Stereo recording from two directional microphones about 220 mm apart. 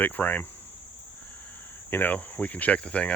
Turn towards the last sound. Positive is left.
turn(degrees=5)  # may be behind; listen again after turning